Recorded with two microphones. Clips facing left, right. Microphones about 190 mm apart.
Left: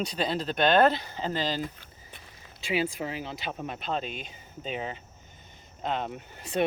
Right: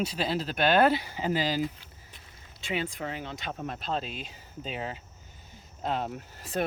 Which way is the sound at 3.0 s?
5° left (ahead or behind).